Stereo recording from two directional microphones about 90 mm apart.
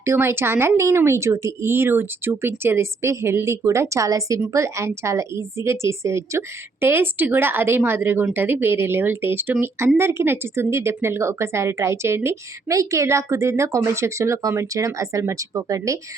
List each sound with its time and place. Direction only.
0.0 s a woman's voice: 30° right (ahead or behind)